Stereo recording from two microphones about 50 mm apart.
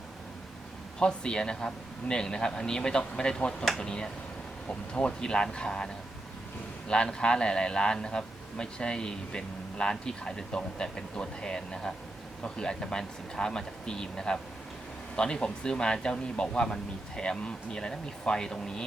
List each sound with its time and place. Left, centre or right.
0.9 s a man's voice: centre